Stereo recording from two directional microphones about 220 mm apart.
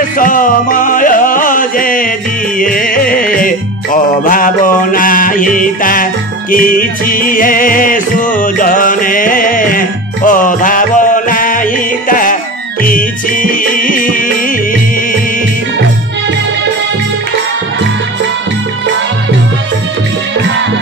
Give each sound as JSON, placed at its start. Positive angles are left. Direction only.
{"t": 0.2, "sound": "music", "side_deg": 40}